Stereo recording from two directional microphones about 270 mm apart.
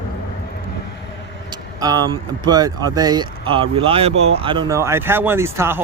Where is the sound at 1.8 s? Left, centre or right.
Centre.